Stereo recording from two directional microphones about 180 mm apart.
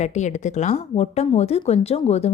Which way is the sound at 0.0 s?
40° left (ahead or behind).